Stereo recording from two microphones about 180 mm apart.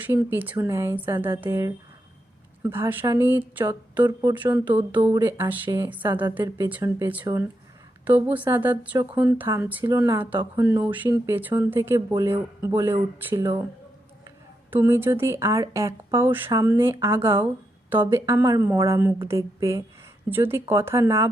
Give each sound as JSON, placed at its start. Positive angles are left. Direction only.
{"t": 0.0, "sound": "speech", "side_deg": -10}
{"t": 14.7, "sound": "speech", "side_deg": -10}